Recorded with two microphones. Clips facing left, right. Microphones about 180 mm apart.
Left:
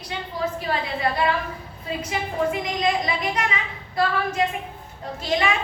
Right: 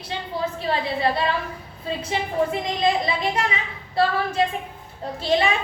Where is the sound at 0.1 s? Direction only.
30° right (ahead or behind).